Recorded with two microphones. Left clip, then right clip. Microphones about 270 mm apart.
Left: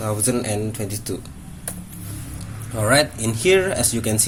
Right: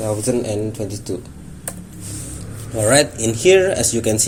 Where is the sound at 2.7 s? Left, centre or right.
Left.